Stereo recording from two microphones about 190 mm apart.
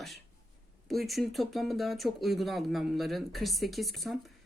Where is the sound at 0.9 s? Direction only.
Centre (ahead or behind).